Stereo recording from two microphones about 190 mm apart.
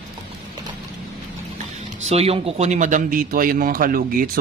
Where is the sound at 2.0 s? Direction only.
30° right (ahead or behind).